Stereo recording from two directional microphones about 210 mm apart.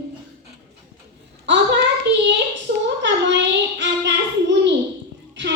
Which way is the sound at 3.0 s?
60° right (ahead or behind).